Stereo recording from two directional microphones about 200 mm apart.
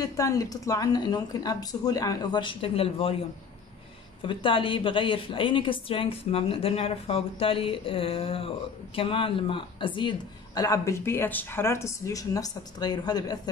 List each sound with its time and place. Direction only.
0.0 s a man's voice: 15° left (ahead or behind)
4.2 s a man's voice: 25° left (ahead or behind)